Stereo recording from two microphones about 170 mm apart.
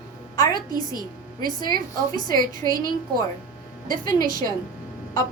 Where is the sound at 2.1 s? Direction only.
20° left (ahead or behind).